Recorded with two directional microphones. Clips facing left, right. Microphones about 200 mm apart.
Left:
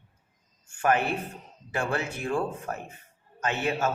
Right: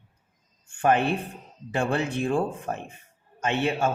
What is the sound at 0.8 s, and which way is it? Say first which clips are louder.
A man's voice: right 3 dB; 25° right (ahead or behind).